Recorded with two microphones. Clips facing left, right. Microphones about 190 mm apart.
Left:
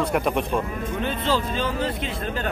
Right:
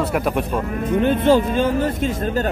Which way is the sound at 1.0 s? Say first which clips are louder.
Right 10 dB; 55° right (ahead or behind).